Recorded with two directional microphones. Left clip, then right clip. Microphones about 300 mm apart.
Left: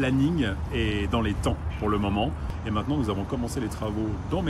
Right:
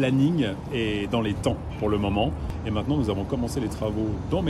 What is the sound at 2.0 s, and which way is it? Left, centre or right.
Speech, right.